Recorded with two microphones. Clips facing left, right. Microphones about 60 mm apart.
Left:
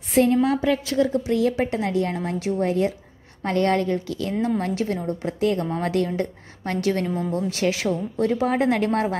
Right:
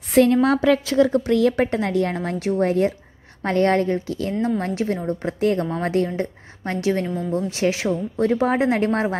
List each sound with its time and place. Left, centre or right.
0.1 s a woman's voice: right
1.1 s a woman's voice: right
1.7 s a woman's voice: right